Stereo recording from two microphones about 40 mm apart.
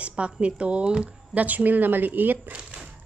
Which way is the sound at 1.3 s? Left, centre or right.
Right.